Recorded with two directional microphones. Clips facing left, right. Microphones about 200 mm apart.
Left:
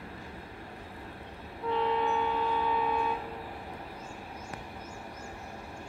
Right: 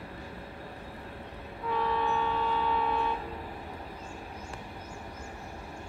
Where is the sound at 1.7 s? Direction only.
20° left (ahead or behind).